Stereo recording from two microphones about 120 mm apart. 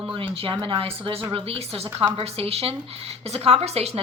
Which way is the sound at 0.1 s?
50° right (ahead or behind).